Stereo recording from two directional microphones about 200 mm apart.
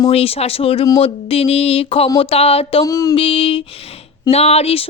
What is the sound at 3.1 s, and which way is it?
Speech, 30° left (ahead or behind).